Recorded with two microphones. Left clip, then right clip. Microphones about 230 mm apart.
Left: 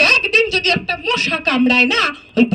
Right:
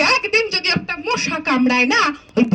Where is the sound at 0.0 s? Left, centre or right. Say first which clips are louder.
Left 4 dB; centre.